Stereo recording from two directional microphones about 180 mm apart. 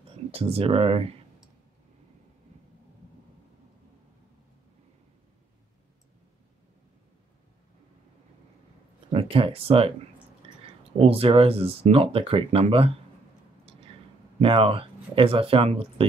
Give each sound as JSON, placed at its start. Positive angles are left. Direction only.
{"t": 0.3, "sound": "speech", "side_deg": -30}
{"t": 9.1, "sound": "speech", "side_deg": -30}
{"t": 10.4, "sound": "a sound", "side_deg": -30}
{"t": 11.1, "sound": "speech", "side_deg": -30}
{"t": 14.4, "sound": "speech", "side_deg": -30}